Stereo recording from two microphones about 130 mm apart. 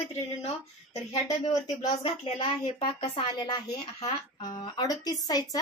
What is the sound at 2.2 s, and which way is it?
Speech, 45° left (ahead or behind).